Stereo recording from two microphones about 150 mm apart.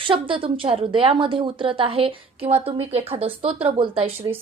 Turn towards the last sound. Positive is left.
turn(degrees=-40)  # may be behind; listen again after turning